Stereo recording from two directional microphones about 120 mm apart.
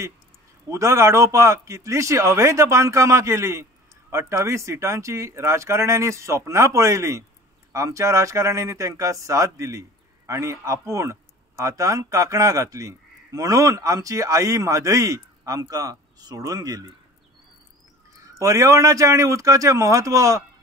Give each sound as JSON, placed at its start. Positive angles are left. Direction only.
{"t": 0.7, "sound": "speech", "side_deg": -25}
{"t": 18.4, "sound": "speech", "side_deg": -25}